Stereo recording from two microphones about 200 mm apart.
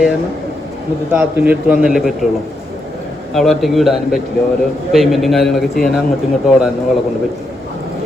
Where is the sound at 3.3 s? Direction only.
Centre (ahead or behind).